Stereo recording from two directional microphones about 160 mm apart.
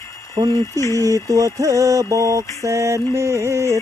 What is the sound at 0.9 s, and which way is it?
Mantra, 20° right (ahead or behind).